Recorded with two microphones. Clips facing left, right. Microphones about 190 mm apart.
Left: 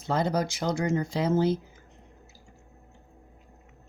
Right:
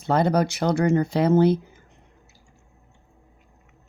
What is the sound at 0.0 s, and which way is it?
Speech, 60° right (ahead or behind).